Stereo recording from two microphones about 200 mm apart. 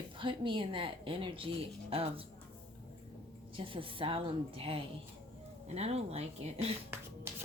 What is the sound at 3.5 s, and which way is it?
A woman's voice, 25° right (ahead or behind).